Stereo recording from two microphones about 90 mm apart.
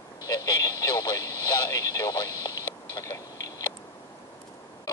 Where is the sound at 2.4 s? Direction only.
60° left (ahead or behind).